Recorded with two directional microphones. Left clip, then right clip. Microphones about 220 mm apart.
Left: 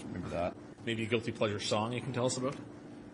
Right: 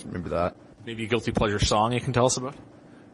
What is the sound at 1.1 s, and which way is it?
Speech, 50° right (ahead or behind).